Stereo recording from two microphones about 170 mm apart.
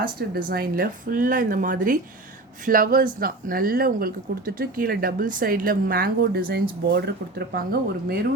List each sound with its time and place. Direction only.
0.0 s speech: 55° right (ahead or behind)